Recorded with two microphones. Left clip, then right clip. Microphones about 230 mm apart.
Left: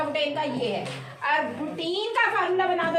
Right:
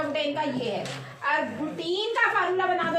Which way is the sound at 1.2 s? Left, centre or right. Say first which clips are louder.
Left 1 dB; centre.